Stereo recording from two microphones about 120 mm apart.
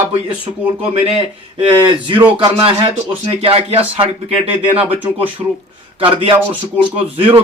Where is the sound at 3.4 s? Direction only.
55° right (ahead or behind).